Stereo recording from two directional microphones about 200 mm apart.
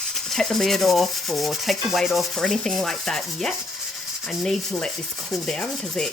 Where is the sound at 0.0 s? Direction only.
Centre (ahead or behind).